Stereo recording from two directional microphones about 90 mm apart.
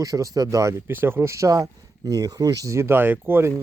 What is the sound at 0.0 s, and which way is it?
Speech, 40° right (ahead or behind).